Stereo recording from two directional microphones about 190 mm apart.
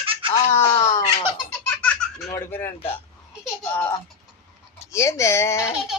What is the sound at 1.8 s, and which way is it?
Baby laughter, 5° left (ahead or behind).